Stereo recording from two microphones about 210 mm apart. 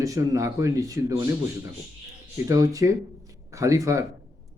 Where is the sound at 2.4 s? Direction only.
15° right (ahead or behind).